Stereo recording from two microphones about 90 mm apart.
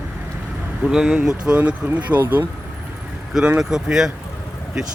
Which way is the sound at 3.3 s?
10° right (ahead or behind).